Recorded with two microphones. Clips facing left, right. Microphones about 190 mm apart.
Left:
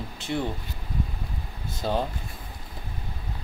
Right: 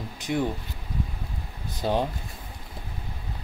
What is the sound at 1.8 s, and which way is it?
Speech, 15° right (ahead or behind).